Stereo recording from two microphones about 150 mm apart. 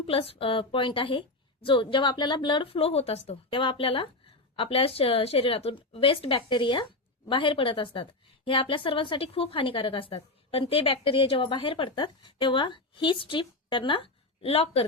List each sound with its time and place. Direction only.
0.0 s a woman's voice: 40° left (ahead or behind)